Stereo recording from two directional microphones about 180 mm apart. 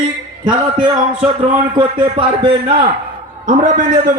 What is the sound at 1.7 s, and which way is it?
A man's voice, 25° right (ahead or behind).